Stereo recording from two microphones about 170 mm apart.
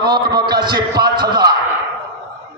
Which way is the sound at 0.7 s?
25° right (ahead or behind).